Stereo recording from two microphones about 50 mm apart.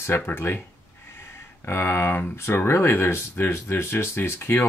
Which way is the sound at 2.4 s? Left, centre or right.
Left.